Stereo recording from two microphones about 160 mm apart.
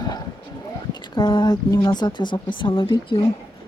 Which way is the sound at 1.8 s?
25° left (ahead or behind).